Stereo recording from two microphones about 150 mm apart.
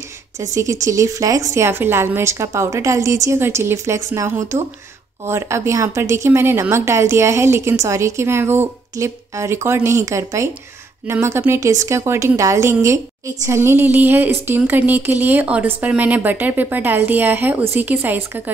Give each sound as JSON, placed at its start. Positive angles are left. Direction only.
{"t": 0.4, "sound": "a woman's voice", "side_deg": -20}